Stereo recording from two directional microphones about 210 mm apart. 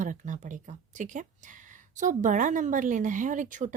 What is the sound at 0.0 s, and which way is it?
Speech, 35° right (ahead or behind).